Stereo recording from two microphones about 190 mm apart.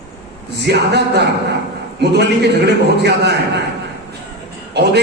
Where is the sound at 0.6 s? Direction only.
60° right (ahead or behind).